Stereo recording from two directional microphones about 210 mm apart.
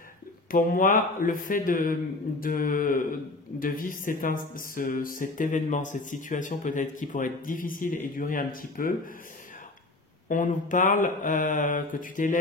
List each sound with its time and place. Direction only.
0.5 s speech: 40° left (ahead or behind)
10.2 s speech: 40° left (ahead or behind)